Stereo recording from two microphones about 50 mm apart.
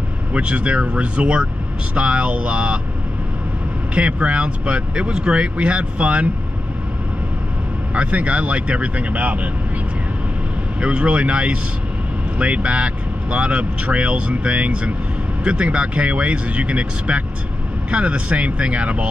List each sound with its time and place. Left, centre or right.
0.3 s speech: right
3.9 s speech: right
7.9 s speech: right
10.8 s speech: right